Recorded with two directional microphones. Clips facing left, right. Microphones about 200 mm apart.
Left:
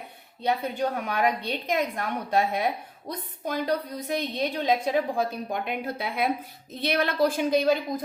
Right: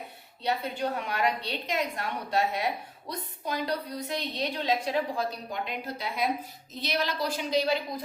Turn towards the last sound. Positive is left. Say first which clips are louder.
# left 4 dB
turn(degrees=50)  # may be behind; listen again after turning